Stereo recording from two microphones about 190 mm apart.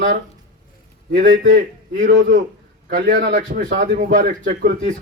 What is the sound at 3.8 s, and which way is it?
A man's voice, 45° right (ahead or behind).